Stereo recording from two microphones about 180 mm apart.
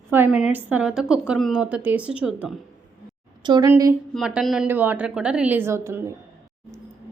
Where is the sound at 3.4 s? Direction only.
25° right (ahead or behind).